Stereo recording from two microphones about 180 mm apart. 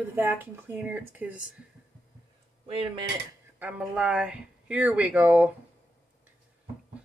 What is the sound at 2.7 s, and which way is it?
Speech, 30° right (ahead or behind).